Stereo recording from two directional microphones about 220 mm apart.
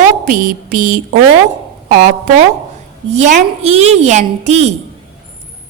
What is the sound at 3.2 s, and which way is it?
A woman's voice, 30° right (ahead or behind).